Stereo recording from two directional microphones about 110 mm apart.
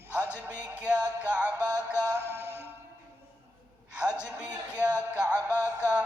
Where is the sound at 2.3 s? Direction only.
20° right (ahead or behind).